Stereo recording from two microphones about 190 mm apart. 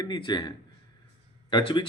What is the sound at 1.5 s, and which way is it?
Speech, 25° left (ahead or behind).